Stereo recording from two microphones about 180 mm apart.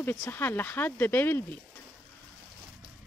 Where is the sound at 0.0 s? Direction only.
10° left (ahead or behind).